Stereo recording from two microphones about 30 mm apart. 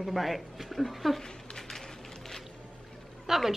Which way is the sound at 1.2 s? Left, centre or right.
Left.